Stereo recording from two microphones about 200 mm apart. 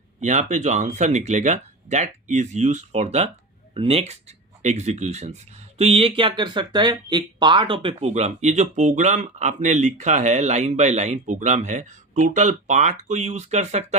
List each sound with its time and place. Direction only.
0.2 s speech: 35° right (ahead or behind)